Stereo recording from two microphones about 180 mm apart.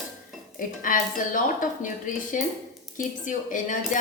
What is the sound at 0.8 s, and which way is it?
A woman's voice, 50° left (ahead or behind).